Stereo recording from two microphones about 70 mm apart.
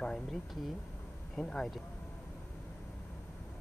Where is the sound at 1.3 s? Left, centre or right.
Centre.